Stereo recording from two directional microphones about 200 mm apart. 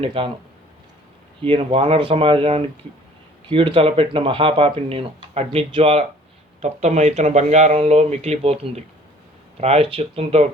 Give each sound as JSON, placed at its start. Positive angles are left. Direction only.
{"t": 0.0, "sound": "speech", "side_deg": -25}
{"t": 1.4, "sound": "speech", "side_deg": -25}